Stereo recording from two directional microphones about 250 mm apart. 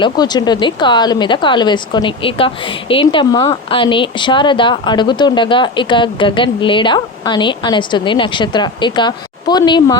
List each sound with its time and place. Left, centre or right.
0.0 s speech: centre